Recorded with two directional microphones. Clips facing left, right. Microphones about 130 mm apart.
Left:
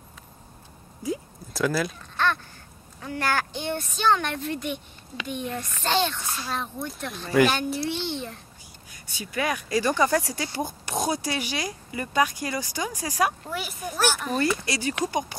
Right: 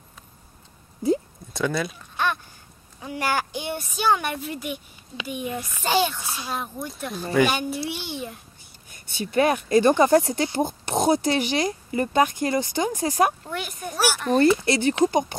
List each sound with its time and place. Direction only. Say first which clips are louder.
1.5 s speech: even; centre (ahead or behind)
2.1 s a sound: even; 15° right (ahead or behind)
3.0 s a child's voice: right 1 dB; 15° right (ahead or behind)
9.0 s speech: right 7 dB; 25° right (ahead or behind)
13.5 s speech: right 1 dB; centre (ahead or behind)
13.9 s a child's voice: right 1 dB; 10° right (ahead or behind)
14.4 s speech: right 8 dB; 25° right (ahead or behind)